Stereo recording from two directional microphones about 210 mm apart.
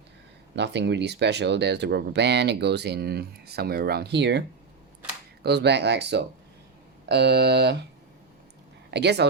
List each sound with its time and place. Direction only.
0.5 s speech: 55° right (ahead or behind)
8.9 s speech: 55° right (ahead or behind)